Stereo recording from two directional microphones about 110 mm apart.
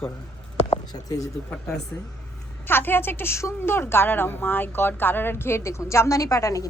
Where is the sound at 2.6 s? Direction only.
20° left (ahead or behind).